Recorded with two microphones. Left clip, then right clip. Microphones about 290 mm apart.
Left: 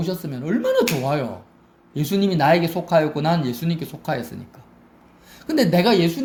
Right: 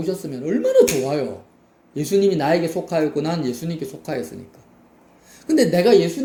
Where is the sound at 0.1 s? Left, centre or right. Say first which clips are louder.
Right 3 dB; left.